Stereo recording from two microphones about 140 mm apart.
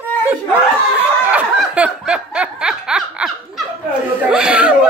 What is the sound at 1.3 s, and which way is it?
Laughter, 10° right (ahead or behind).